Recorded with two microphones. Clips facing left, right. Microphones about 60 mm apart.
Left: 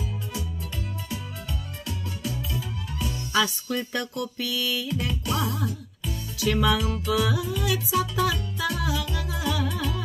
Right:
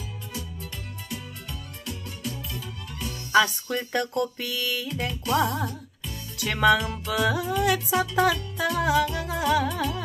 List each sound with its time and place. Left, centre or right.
3.3 s music: right